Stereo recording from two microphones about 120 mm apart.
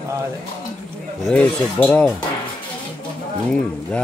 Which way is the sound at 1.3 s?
10° left (ahead or behind).